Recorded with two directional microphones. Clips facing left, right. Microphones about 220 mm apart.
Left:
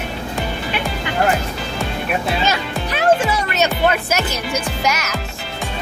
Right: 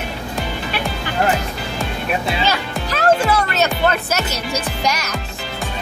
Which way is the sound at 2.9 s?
15° left (ahead or behind).